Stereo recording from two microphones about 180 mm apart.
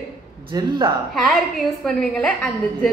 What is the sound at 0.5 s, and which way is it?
Speech, 20° right (ahead or behind).